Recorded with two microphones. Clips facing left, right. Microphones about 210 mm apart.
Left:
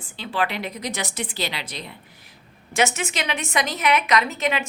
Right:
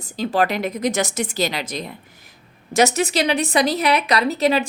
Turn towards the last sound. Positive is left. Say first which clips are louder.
# right 5 dB
turn(degrees=-35)  # may be behind; listen again after turning